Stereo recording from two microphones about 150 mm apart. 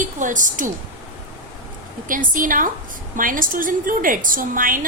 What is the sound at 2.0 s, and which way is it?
A woman's voice, 65° right (ahead or behind).